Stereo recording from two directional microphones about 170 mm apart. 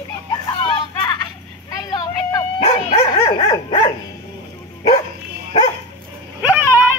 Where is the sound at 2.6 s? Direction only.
35° left (ahead or behind).